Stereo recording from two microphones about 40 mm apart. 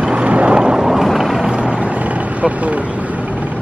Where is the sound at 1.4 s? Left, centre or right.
Right.